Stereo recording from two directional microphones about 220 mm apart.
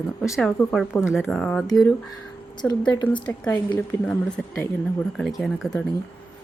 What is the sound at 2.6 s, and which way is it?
Speech, 5° left (ahead or behind).